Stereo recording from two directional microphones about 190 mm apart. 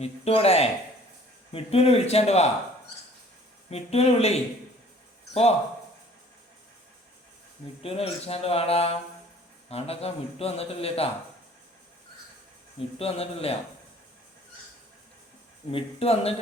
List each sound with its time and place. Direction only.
0.0 s a man's voice: 30° left (ahead or behind)
3.7 s a man's voice: 35° left (ahead or behind)
7.8 s a man's voice: 30° left (ahead or behind)
13.0 s a man's voice: 30° left (ahead or behind)
15.7 s a man's voice: 30° left (ahead or behind)